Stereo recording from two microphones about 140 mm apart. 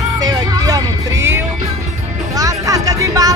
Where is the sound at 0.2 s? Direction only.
25° right (ahead or behind).